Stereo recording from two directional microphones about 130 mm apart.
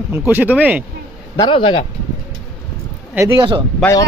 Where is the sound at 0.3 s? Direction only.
15° right (ahead or behind).